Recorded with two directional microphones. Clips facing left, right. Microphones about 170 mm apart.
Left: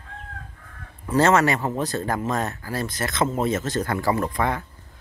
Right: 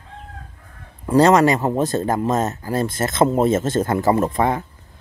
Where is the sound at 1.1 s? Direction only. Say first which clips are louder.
Right 5 dB; 35° right (ahead or behind).